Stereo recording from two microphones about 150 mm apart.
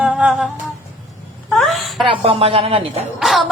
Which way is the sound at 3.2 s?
Centre (ahead or behind).